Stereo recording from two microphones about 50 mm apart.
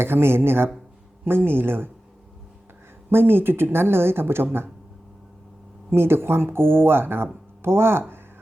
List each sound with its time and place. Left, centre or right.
0.0 s speech: right
3.1 s speech: right
5.9 s speech: right